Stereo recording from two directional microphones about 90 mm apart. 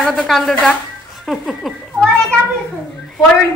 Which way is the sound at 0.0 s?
Centre (ahead or behind).